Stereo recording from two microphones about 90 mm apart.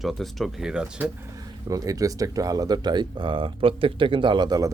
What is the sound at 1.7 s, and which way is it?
Speech, 40° right (ahead or behind).